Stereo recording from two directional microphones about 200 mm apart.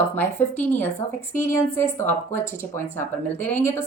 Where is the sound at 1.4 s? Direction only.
10° left (ahead or behind).